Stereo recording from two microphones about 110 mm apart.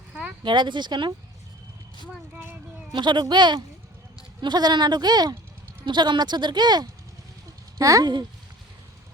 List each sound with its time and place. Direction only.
0.1 s a sound: 15° right (ahead or behind)
0.4 s speech: 45° right (ahead or behind)
2.3 s speech: 15° right (ahead or behind)
2.9 s speech: 45° right (ahead or behind)